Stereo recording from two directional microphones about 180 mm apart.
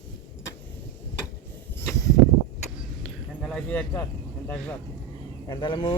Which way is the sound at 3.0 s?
5° left (ahead or behind).